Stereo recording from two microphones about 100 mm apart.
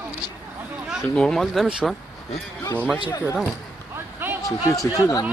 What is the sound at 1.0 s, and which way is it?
Speech, 5° left (ahead or behind).